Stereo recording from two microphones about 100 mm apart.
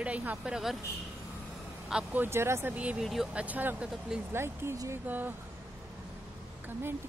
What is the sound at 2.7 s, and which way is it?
Speech, 15° right (ahead or behind).